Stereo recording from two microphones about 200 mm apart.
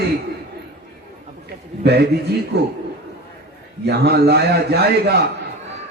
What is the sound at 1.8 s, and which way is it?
Speech, 55° right (ahead or behind).